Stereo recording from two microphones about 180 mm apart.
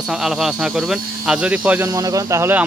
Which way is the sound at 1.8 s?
20° right (ahead or behind).